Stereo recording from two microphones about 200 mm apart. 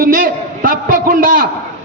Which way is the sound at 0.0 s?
45° right (ahead or behind).